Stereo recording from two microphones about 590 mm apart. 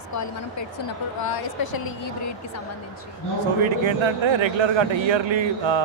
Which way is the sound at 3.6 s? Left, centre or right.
Right.